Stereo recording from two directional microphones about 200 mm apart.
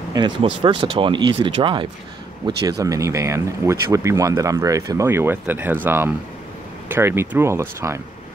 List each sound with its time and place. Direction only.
0.1 s speech: 20° right (ahead or behind)